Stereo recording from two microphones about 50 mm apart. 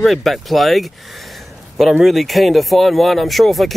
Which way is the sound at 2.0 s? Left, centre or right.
Centre.